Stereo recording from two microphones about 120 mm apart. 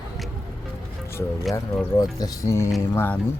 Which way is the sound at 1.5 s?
35° left (ahead or behind).